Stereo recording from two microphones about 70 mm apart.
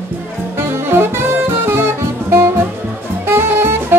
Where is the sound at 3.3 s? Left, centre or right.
Right.